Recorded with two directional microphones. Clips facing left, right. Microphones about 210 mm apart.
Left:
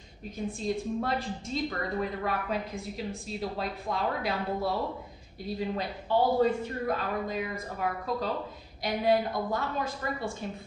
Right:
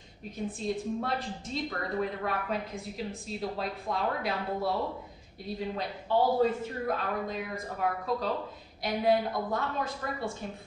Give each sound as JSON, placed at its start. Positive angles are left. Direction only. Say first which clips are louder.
{"t": 0.5, "sound": "a woman's voice", "louder": "left 1 dB", "side_deg": 0}